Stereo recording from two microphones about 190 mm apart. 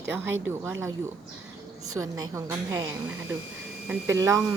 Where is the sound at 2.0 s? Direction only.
10° right (ahead or behind).